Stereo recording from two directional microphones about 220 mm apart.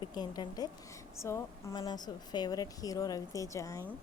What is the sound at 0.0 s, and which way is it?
A woman's voice, 20° left (ahead or behind).